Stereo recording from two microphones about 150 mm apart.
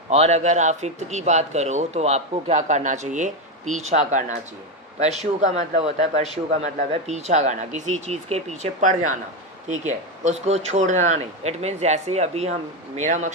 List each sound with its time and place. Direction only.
0.1 s speech: 45° right (ahead or behind)